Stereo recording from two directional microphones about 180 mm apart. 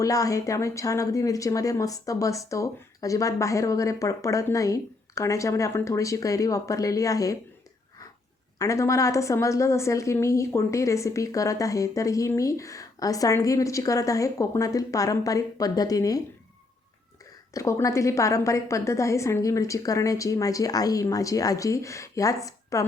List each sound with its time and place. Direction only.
0.0 s a woman's voice: 20° left (ahead or behind)
8.5 s a woman's voice: 15° left (ahead or behind)
17.5 s a woman's voice: 15° left (ahead or behind)